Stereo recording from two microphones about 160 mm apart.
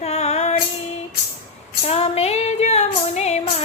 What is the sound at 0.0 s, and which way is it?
Female singing, 40° left (ahead or behind).